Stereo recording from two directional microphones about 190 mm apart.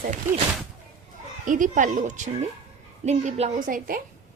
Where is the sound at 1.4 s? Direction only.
45° right (ahead or behind).